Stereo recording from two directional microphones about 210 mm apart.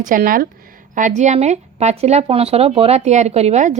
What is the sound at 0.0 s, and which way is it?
Speech, 40° right (ahead or behind).